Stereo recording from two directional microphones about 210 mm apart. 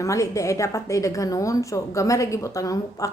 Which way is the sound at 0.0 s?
15° left (ahead or behind).